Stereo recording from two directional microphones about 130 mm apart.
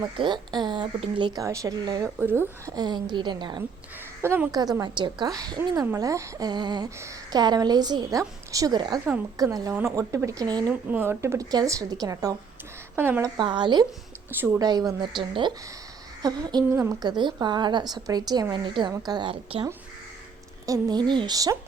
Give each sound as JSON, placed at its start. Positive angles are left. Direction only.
{"t": 0.2, "sound": "a woman's voice", "side_deg": -35}
{"t": 1.4, "sound": "speech", "side_deg": -25}
{"t": 2.0, "sound": "speech", "side_deg": -15}
{"t": 2.7, "sound": "a woman's voice", "side_deg": -35}
{"t": 4.2, "sound": "a woman's voice", "side_deg": -20}
{"t": 4.5, "sound": "a woman's voice", "side_deg": -30}
{"t": 10.7, "sound": "speech", "side_deg": -15}
{"t": 13.0, "sound": "speech", "side_deg": -15}
{"t": 13.3, "sound": "a woman's voice", "side_deg": -35}
{"t": 16.7, "sound": "speech", "side_deg": -20}
{"t": 17.0, "sound": "a woman's voice", "side_deg": -35}
{"t": 20.7, "sound": "a woman's voice", "side_deg": -30}